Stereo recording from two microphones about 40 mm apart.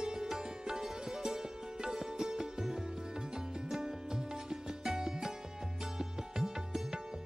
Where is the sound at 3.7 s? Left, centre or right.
Centre.